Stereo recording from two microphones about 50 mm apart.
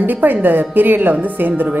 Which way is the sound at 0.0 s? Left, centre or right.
Right.